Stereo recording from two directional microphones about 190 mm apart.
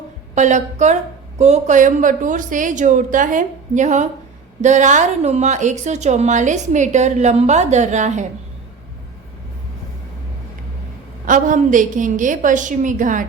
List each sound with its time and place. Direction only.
0.3 s a woman's voice: 40° right (ahead or behind)
11.3 s a woman's voice: 45° right (ahead or behind)